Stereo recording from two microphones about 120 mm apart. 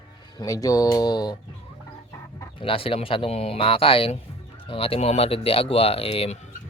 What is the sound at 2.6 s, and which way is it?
Speech, 50° left (ahead or behind).